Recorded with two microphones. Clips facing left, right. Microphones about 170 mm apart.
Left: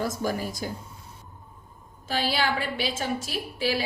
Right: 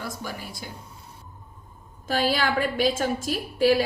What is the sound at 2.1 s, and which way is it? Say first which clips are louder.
Speech: right 3 dB; 45° right (ahead or behind).